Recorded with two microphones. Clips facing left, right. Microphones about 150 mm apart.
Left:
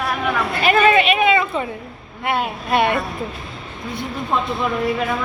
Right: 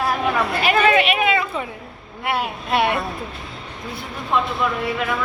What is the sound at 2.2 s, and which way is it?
Speech, 5° right (ahead or behind).